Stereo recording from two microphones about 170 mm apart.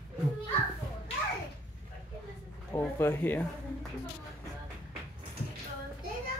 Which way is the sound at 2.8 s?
10° left (ahead or behind).